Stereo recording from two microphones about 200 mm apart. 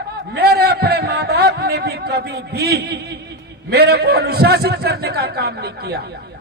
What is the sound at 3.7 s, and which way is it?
A man's voice, 55° right (ahead or behind).